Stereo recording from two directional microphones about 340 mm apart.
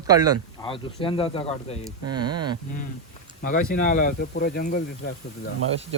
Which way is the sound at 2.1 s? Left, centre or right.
Centre.